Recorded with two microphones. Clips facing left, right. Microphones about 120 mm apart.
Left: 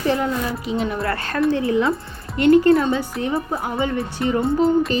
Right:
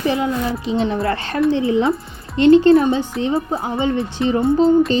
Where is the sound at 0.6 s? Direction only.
30° right (ahead or behind).